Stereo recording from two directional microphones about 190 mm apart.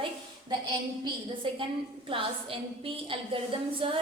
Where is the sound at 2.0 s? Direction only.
30° right (ahead or behind).